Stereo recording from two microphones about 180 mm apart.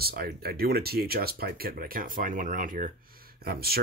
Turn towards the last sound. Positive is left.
turn(degrees=-60)  # may be behind; listen again after turning